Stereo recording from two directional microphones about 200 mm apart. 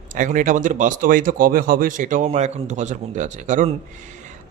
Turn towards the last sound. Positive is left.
turn(degrees=-40)  # may be behind; listen again after turning